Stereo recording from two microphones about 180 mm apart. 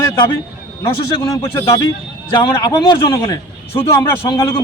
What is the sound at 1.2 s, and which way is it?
A man's voice, 15° left (ahead or behind).